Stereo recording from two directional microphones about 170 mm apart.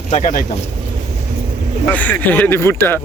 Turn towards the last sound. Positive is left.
turn(degrees=15)  # may be behind; listen again after turning